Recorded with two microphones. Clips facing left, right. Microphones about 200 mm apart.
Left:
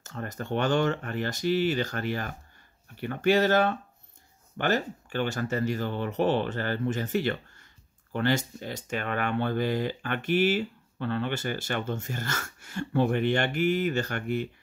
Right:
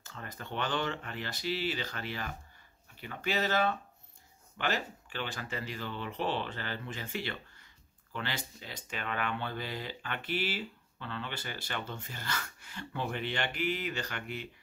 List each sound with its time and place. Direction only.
0.0 s speech: 45° left (ahead or behind)